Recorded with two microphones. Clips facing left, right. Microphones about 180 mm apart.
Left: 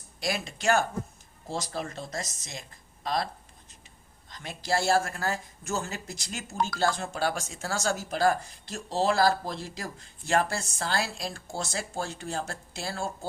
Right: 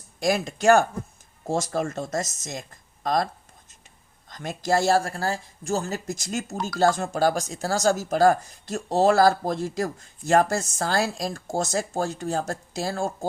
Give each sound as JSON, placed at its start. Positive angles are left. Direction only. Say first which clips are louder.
{"t": 0.2, "sound": "speech", "louder": "right 8 dB", "side_deg": -45}
{"t": 4.3, "sound": "speech", "louder": "right 6 dB", "side_deg": -45}